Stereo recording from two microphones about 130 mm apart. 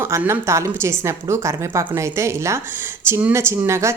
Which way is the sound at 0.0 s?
20° right (ahead or behind).